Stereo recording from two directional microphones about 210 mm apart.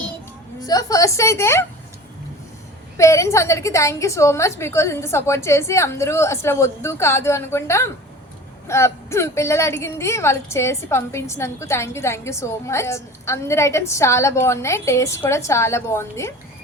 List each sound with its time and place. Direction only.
0.6 s a woman's voice: 15° left (ahead or behind)
3.0 s a woman's voice: 15° left (ahead or behind)